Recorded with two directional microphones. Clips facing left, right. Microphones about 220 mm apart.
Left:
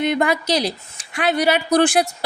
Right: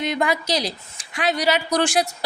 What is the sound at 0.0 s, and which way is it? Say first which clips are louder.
A woman's voice: left 4 dB; 55° left (ahead or behind).